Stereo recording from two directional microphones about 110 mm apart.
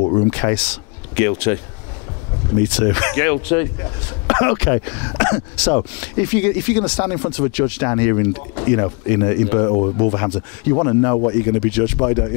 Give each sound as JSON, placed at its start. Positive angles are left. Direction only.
{"t": 0.3, "sound": "speech", "side_deg": 15}
{"t": 2.6, "sound": "speech", "side_deg": 10}
{"t": 9.7, "sound": "speech", "side_deg": 30}
{"t": 9.9, "sound": "speech", "side_deg": 15}
{"t": 10.7, "sound": "speech", "side_deg": 30}
{"t": 11.4, "sound": "speech", "side_deg": 15}